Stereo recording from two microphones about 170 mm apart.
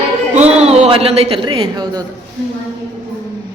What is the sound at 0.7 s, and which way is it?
Speech, 35° right (ahead or behind).